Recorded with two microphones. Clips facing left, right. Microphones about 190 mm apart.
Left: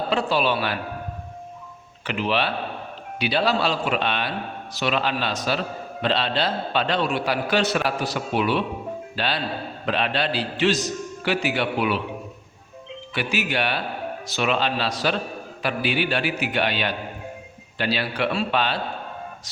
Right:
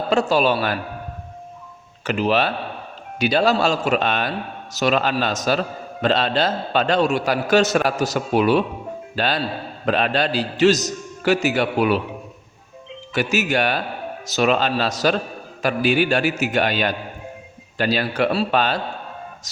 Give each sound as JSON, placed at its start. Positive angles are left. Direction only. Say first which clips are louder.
{"t": 0.1, "sound": "a man's voice", "louder": "right 5 dB", "side_deg": -45}
{"t": 2.0, "sound": "a man's voice", "louder": "right 4 dB", "side_deg": -45}
{"t": 13.1, "sound": "a man's voice", "louder": "right 5 dB", "side_deg": -45}